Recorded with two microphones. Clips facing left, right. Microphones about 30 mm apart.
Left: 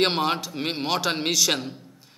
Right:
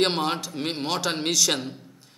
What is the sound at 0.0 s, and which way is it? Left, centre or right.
A man's voice, centre.